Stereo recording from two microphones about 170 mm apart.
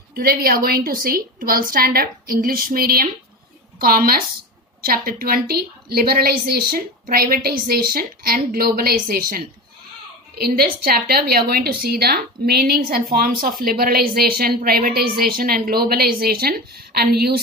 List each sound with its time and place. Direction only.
0.1 s a woman's voice: 60° right (ahead or behind)